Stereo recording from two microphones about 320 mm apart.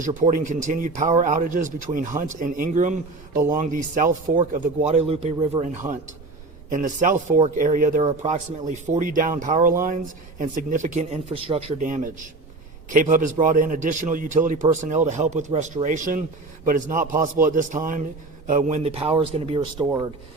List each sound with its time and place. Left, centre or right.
0.0 s a man's voice: right
6.7 s a man's voice: right; by 20.1 s centre